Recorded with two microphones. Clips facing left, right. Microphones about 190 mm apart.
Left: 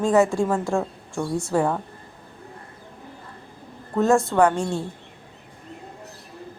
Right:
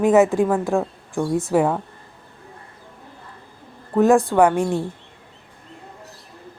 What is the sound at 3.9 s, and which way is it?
Speech, 15° right (ahead or behind).